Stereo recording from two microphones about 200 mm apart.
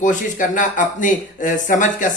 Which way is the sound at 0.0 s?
40° left (ahead or behind).